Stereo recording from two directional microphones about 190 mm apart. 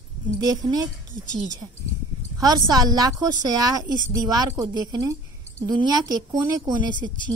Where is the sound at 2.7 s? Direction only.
20° right (ahead or behind).